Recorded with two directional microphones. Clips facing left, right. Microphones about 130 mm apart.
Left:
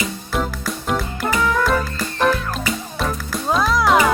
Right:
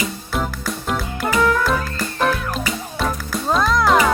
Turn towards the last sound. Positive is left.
turn(degrees=0)  # may be behind; listen again after turning